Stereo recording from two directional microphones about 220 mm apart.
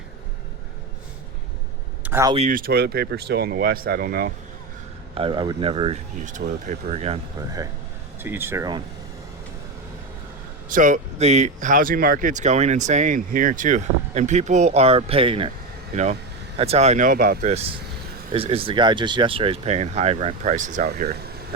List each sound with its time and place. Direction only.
2.0 s speech: 10° right (ahead or behind)
2.3 s speech: 35° right (ahead or behind)
5.1 s speech: 20° right (ahead or behind)
8.2 s speech: 10° right (ahead or behind)
10.7 s speech: 35° right (ahead or behind)
16.6 s speech: 30° right (ahead or behind)
18.3 s speech: 25° right (ahead or behind); by 21.2 s 45° right (ahead or behind)